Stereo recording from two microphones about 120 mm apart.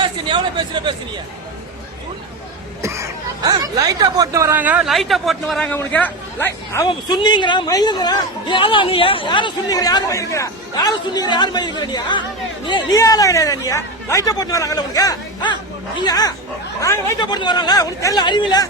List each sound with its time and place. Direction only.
0.0 s speech: 45° right (ahead or behind)
2.8 s speech: 25° right (ahead or behind)
4.6 s speech: 15° right (ahead or behind)
4.9 s a man's voice: centre (ahead or behind)
5.6 s speech: 15° left (ahead or behind)
6.7 s speech: 25° left (ahead or behind)
7.1 s a man's voice: 40° left (ahead or behind)
13.0 s a man's voice: 30° left (ahead or behind)
17.3 s a man's voice: 40° left (ahead or behind)